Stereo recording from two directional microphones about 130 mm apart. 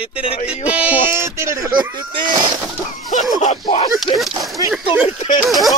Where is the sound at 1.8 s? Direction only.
35° right (ahead or behind).